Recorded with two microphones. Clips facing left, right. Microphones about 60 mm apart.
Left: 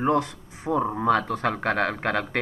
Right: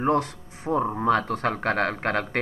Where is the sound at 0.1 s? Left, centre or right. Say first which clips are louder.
Even; right.